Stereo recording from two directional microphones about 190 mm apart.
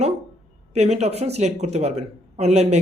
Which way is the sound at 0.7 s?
35° right (ahead or behind).